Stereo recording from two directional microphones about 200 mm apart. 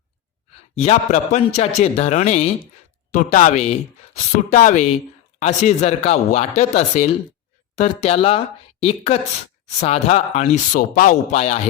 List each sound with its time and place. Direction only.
0.5 s a man's voice: 30° left (ahead or behind)